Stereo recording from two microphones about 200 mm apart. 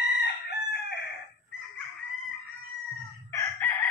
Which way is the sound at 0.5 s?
55° left (ahead or behind).